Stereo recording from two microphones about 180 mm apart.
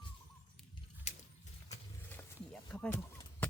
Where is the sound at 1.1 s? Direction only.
40° left (ahead or behind).